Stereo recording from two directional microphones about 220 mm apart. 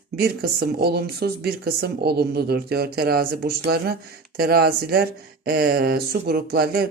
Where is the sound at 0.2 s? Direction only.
45° right (ahead or behind).